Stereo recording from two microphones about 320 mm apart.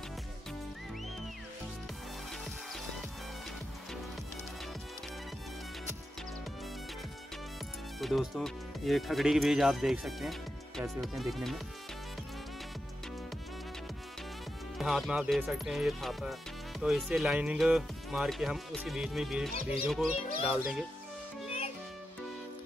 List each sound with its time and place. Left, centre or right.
8.0 s speech: centre
14.8 s speech: centre